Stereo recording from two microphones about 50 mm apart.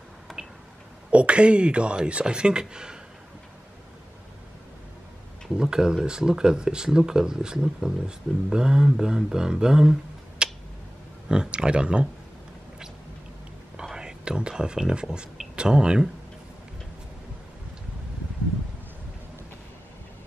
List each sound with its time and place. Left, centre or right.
0.3 s a sound: centre
1.1 s speech: right
5.5 s speech: centre
10.4 s tick-tock: centre
11.2 s speech: centre
13.9 s speech: centre